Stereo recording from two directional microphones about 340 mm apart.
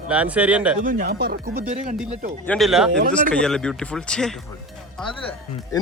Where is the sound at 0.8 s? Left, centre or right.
Right.